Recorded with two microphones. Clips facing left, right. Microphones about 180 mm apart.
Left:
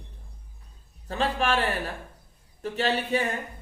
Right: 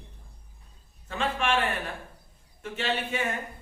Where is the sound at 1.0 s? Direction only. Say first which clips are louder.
Left 2 dB; 35° left (ahead or behind).